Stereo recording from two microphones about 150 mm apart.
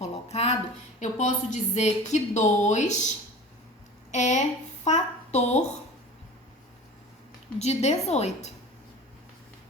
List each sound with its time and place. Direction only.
0.0 s a sound: 45° left (ahead or behind)
0.9 s speech: 55° left (ahead or behind)
4.1 s a woman's voice: 50° left (ahead or behind)
7.6 s speech: 45° left (ahead or behind)